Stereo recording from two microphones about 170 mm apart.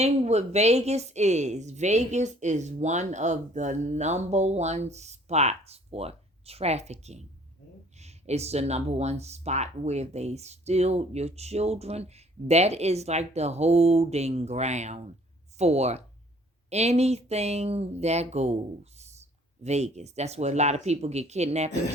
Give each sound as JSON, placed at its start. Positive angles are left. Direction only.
{"t": 0.0, "sound": "a woman's voice", "side_deg": -40}